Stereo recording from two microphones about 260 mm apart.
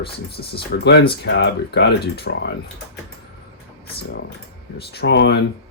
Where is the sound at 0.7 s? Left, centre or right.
Left.